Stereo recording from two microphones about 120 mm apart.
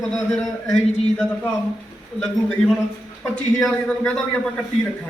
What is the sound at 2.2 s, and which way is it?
A man's voice, 5° left (ahead or behind).